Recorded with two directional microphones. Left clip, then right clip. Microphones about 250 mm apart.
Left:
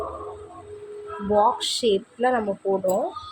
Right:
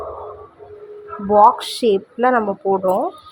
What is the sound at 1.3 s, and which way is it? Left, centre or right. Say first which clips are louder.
A woman's voice: right 8 dB; centre.